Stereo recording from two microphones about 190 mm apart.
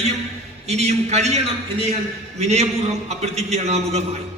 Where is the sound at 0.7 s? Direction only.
35° right (ahead or behind).